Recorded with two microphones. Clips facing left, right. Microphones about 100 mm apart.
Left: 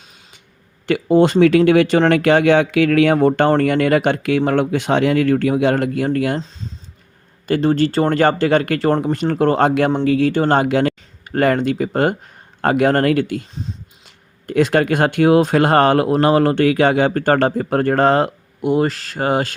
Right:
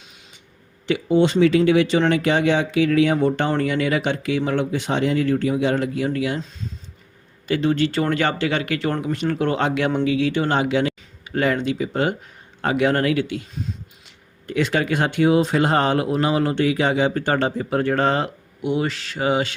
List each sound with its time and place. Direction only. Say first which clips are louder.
0.9 s speech: left 4 dB; 50° left (ahead or behind)
7.4 s speech: left 4 dB; 45° left (ahead or behind)
14.4 s speech: left 6 dB; 50° left (ahead or behind)